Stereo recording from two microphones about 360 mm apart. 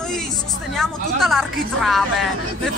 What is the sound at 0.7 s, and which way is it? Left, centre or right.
A woman's voice, centre.